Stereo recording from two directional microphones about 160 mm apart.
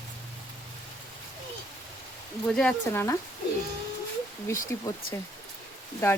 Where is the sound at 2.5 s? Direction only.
5° left (ahead or behind).